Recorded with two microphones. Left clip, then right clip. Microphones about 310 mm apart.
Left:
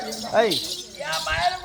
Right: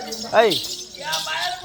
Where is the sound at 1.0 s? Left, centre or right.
Centre.